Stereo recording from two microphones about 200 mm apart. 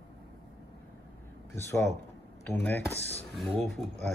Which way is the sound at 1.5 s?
10° left (ahead or behind).